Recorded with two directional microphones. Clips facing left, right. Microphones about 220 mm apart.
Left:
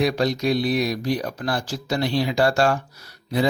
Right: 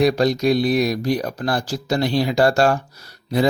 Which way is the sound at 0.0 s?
40° right (ahead or behind).